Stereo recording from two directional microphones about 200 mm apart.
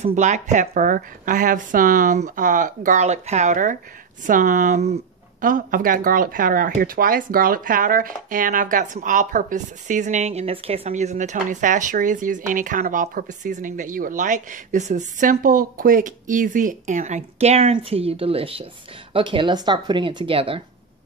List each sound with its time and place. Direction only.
0.0 s speech: 35° right (ahead or behind)